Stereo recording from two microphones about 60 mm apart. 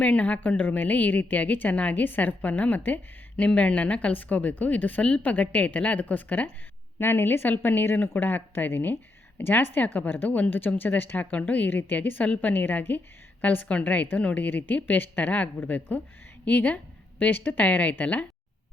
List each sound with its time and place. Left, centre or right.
0.0 s a woman's voice: left
7.0 s a woman's voice: left